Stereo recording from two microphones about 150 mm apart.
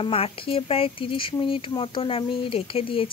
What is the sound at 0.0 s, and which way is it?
Speech, 40° left (ahead or behind).